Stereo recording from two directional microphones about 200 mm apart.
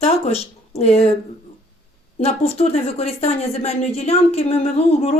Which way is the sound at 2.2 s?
30° left (ahead or behind).